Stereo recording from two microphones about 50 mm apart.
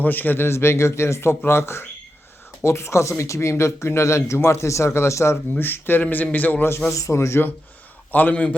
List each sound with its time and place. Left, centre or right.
0.0 s a man's voice: left
2.6 s speech: left
5.6 s a man's voice: left
6.9 s speech: left
8.1 s a man's voice: left